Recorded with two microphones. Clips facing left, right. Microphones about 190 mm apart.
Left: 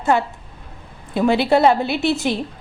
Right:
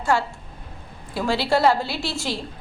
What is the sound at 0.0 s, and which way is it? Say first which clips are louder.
A woman's voice: left 4 dB; 20° left (ahead or behind).